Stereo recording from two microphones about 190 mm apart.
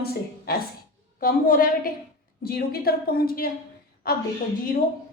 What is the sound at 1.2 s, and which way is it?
A woman's voice, 50° left (ahead or behind).